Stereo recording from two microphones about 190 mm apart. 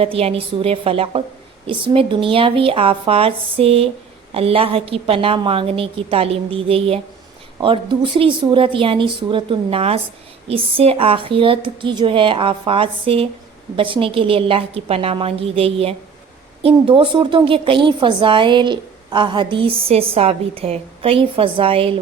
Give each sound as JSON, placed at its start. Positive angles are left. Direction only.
{"t": 0.0, "sound": "a woman's voice", "side_deg": -30}